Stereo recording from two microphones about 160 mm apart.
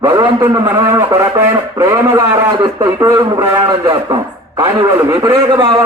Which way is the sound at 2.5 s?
25° right (ahead or behind).